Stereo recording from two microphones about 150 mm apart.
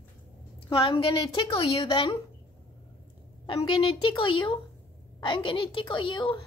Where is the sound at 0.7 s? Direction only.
35° left (ahead or behind).